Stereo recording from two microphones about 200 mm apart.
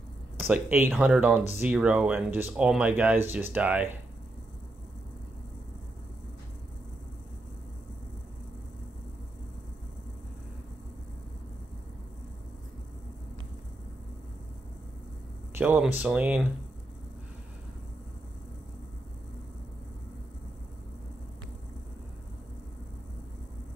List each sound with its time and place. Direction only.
0.4 s speech: 10° right (ahead or behind)
15.5 s speech: 10° right (ahead or behind)